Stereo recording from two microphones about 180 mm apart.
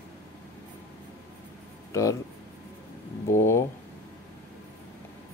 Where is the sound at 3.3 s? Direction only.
15° left (ahead or behind).